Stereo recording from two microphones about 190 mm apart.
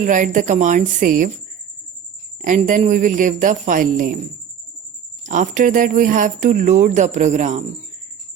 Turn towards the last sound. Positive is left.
turn(degrees=-40)  # may be behind; listen again after turning